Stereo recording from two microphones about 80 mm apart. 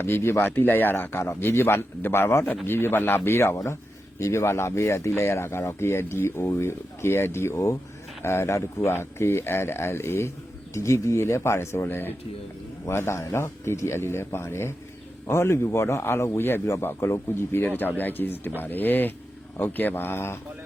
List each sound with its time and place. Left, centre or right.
0.0 s speech: left